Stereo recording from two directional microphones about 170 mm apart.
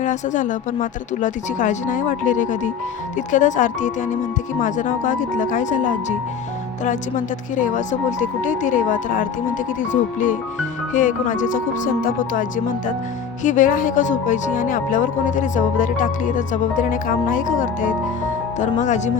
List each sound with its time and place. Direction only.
0.0 s speech: 50° left (ahead or behind)